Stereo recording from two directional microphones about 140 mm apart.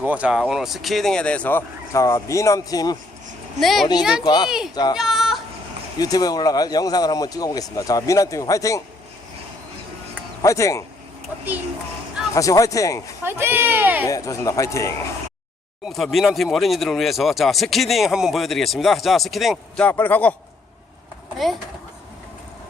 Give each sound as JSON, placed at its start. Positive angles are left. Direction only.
{"t": 0.0, "sound": "speech", "side_deg": -10}
{"t": 3.6, "sound": "speech", "side_deg": 0}
{"t": 4.2, "sound": "speech", "side_deg": 30}
{"t": 4.4, "sound": "speech", "side_deg": -5}
{"t": 4.7, "sound": "speech", "side_deg": 30}
{"t": 4.9, "sound": "a sound", "side_deg": -5}
{"t": 6.0, "sound": "speech", "side_deg": 25}
{"t": 10.4, "sound": "speech", "side_deg": 20}
{"t": 12.3, "sound": "speech", "side_deg": 25}
{"t": 13.2, "sound": "speech", "side_deg": -15}
{"t": 14.1, "sound": "speech", "side_deg": 25}
{"t": 15.9, "sound": "speech", "side_deg": 0}
{"t": 19.8, "sound": "speech", "side_deg": 15}